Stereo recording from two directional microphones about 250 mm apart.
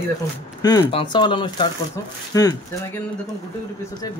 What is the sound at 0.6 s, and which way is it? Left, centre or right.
Speech, centre.